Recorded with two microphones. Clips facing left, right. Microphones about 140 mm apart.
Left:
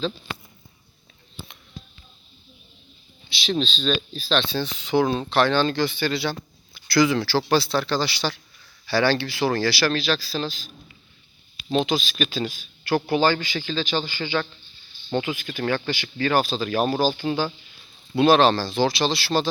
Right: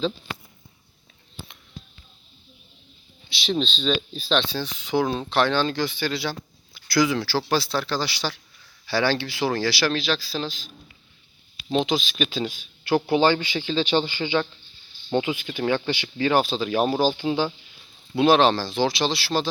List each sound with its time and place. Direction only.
3.6 s speech: 5° left (ahead or behind)
4.1 s speech: 15° right (ahead or behind)
11.7 s speech: 5° right (ahead or behind)
12.9 s speech: 20° right (ahead or behind)
16.4 s speech: centre (ahead or behind)
16.7 s speech: 15° right (ahead or behind)
18.1 s speech: 10° right (ahead or behind)